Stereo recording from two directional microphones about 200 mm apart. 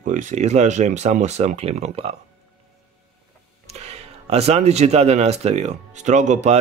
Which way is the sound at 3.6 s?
35° right (ahead or behind).